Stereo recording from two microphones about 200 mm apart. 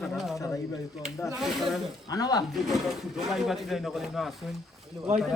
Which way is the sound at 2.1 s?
20° left (ahead or behind).